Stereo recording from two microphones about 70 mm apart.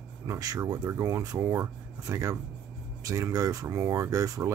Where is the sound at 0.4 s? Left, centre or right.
Right.